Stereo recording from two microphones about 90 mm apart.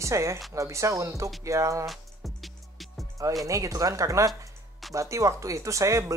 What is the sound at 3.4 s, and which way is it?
Speech, 35° right (ahead or behind).